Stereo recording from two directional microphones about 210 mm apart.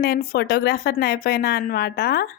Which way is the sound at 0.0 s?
45° left (ahead or behind).